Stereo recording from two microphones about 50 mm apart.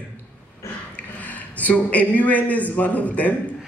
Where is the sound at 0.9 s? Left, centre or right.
Left.